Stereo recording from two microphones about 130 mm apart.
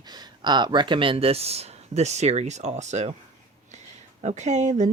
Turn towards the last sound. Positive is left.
turn(degrees=-60)  # may be behind; listen again after turning